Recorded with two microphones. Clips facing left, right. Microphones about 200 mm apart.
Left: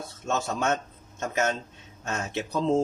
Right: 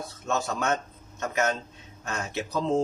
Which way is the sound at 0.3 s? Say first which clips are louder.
Left 1 dB; 25° left (ahead or behind).